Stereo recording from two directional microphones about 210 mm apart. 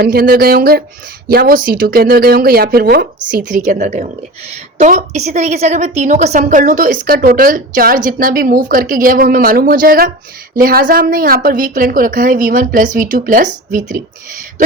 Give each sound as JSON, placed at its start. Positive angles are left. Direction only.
{"t": 0.0, "sound": "a woman's voice", "side_deg": -45}